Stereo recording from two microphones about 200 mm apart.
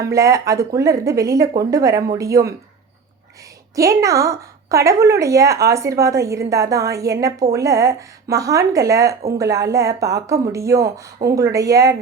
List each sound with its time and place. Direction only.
0.0 s a woman's voice: 15° right (ahead or behind)
3.8 s a woman's voice: 15° right (ahead or behind)